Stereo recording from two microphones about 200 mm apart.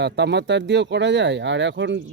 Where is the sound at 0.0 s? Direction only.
60° right (ahead or behind).